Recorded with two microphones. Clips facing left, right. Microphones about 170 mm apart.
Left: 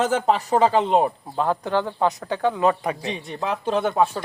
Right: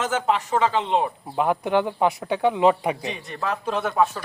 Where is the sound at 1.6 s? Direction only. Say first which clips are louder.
Right 1 dB; 15° right (ahead or behind).